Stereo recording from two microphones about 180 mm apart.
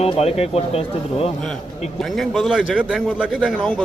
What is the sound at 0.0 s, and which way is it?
Speech, 35° left (ahead or behind).